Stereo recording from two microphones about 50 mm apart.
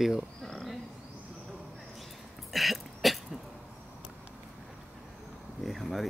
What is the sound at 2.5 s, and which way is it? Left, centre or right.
Cough, centre.